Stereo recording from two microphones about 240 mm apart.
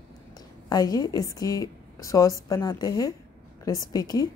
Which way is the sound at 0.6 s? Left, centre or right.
Centre.